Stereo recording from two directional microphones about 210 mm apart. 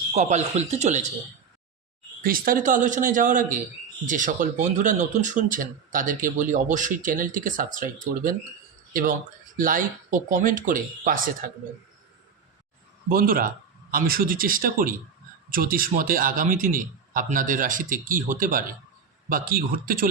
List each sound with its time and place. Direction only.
0.1 s speech: 35° right (ahead or behind)
2.2 s speech: 45° right (ahead or behind)
8.9 s speech: 40° right (ahead or behind)
13.1 s speech: 45° right (ahead or behind)